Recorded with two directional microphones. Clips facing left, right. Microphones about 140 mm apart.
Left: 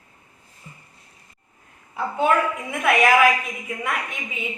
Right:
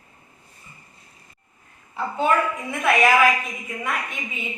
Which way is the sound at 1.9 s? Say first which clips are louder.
Left 1 dB; 10° left (ahead or behind).